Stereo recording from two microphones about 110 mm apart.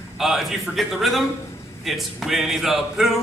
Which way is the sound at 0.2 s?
Centre (ahead or behind).